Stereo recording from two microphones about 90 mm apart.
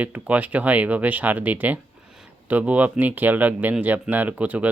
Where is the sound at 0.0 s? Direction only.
15° right (ahead or behind).